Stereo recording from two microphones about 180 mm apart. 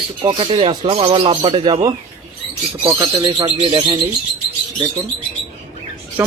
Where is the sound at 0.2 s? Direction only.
30° right (ahead or behind).